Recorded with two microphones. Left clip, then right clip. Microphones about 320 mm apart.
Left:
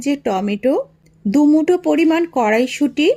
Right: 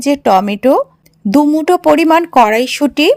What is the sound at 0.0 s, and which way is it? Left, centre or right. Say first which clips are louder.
A woman's voice: right 9 dB; right.